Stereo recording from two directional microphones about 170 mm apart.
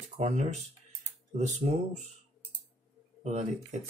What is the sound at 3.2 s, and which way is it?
Speech, 45° right (ahead or behind).